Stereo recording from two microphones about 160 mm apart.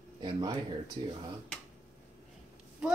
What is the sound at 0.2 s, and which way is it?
Speech, 25° right (ahead or behind).